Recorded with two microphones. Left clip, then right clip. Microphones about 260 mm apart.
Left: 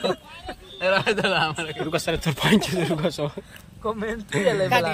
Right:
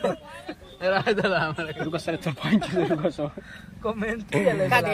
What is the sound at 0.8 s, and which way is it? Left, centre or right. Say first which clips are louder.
A man's voice: left 2 dB; centre.